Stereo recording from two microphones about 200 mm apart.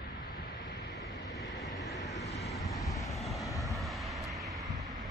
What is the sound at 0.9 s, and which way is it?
Vehicle, 20° left (ahead or behind).